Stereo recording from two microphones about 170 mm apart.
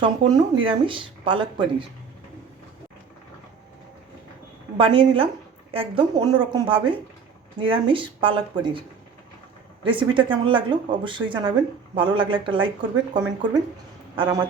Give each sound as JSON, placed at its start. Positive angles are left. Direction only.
{"t": 0.0, "sound": "speech", "side_deg": -30}
{"t": 4.8, "sound": "a woman's voice", "side_deg": -30}
{"t": 9.8, "sound": "speech", "side_deg": -30}